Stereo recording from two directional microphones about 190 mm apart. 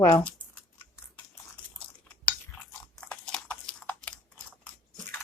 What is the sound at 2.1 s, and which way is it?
Chewing, 5° left (ahead or behind).